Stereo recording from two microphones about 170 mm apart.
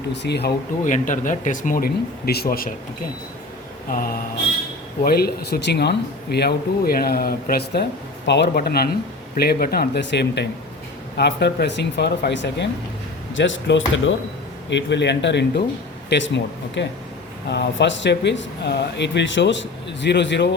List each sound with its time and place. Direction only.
0.1 s speech: 85° left
0.9 s speech: 50° left (ahead or behind)
5.0 s speech: 65° left (ahead or behind)
8.3 s speech: 80° left